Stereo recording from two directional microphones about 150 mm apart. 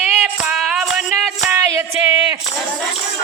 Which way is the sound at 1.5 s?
15° right (ahead or behind).